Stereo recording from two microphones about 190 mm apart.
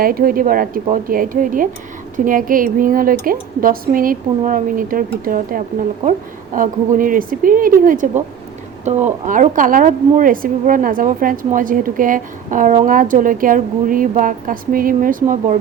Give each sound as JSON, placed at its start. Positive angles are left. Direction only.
{"t": 0.0, "sound": "a woman's voice", "side_deg": -50}